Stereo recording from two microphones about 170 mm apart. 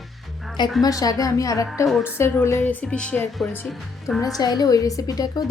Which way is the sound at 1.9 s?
Centre (ahead or behind).